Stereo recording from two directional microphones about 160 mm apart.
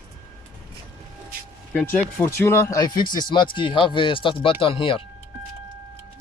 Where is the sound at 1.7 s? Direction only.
10° left (ahead or behind); by 5.0 s 35° left (ahead or behind).